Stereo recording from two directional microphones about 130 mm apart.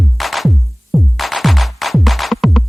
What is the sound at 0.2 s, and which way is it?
Music, centre (ahead or behind).